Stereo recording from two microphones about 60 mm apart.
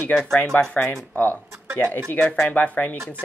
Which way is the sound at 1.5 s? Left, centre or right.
Right.